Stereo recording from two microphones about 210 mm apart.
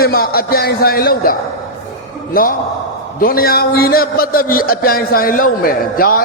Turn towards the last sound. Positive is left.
turn(degrees=45)  # may be behind; listen again after turning